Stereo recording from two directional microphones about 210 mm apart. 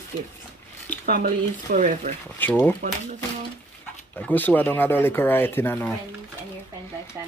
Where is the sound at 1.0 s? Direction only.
40° right (ahead or behind).